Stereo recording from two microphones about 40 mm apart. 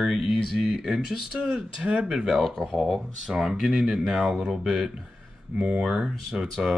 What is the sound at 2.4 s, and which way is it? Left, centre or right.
Speech, centre.